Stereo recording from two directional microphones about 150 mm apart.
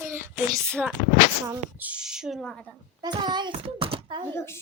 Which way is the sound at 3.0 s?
30° right (ahead or behind).